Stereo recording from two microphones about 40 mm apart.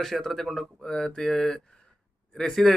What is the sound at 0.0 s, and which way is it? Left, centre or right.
Speech, centre.